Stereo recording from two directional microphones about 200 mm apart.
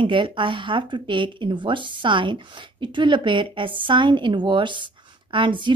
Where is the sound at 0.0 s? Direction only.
25° right (ahead or behind).